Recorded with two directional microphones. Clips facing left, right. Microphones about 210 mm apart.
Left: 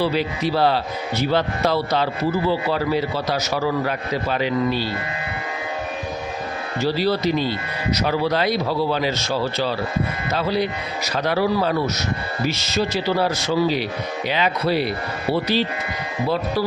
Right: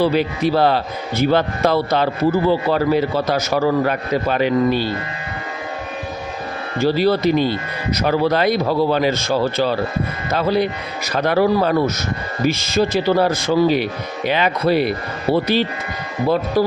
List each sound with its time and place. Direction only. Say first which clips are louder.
0.0 s a man's voice: right 4 dB; 50° right (ahead or behind)
6.7 s a man's voice: right 5 dB; 50° right (ahead or behind)
16.6 s speech: right 6 dB; 50° right (ahead or behind)